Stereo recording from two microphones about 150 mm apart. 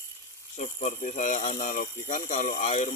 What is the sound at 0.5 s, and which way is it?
Speech, 60° left (ahead or behind).